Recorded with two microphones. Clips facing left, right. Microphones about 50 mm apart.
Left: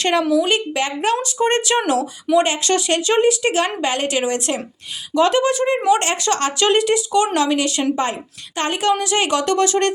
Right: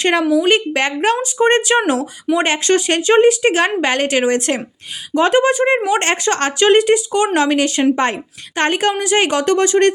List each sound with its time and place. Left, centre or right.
0.0 s a woman's voice: right
1.1 s a woman's voice: right
8.0 s a woman's voice: right